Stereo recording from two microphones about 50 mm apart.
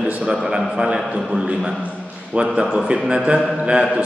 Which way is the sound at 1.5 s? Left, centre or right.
Centre.